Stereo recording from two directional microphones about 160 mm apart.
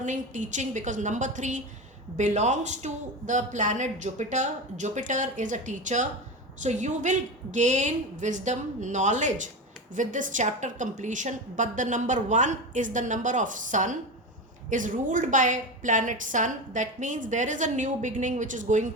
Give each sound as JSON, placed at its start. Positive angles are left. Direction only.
{"t": 0.0, "sound": "a woman's voice", "side_deg": -50}